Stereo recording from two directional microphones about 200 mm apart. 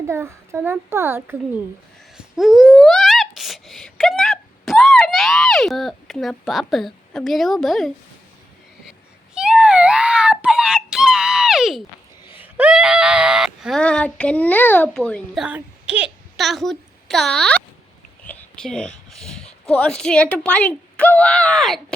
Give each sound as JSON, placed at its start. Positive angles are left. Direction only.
{"t": 0.1, "sound": "a child's voice", "side_deg": -10}
{"t": 8.9, "sound": "a sound", "side_deg": -5}
{"t": 12.4, "sound": "a woman's voice", "side_deg": -5}